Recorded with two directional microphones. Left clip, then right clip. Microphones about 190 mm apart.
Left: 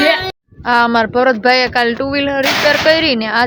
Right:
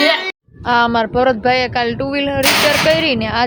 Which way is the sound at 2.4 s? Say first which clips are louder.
Right 3 dB; 65° right (ahead or behind).